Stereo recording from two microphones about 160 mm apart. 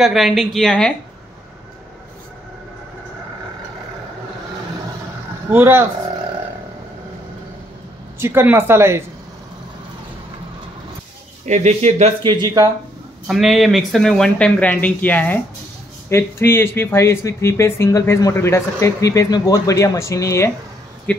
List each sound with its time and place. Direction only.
0.0 s speech: centre (ahead or behind)
5.5 s speech: 15° right (ahead or behind)
8.2 s speech: 15° right (ahead or behind)
11.4 s speech: 45° right (ahead or behind)
12.2 s speech: 30° right (ahead or behind)
13.3 s speech: centre (ahead or behind); by 20.5 s 20° left (ahead or behind)
21.1 s a sound: 10° left (ahead or behind)